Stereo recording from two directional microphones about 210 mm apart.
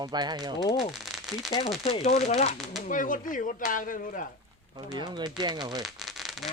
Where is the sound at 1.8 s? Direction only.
25° left (ahead or behind).